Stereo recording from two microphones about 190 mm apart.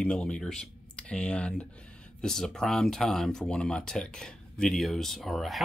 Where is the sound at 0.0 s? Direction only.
5° left (ahead or behind).